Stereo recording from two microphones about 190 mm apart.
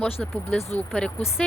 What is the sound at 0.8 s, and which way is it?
Speech, 5° left (ahead or behind).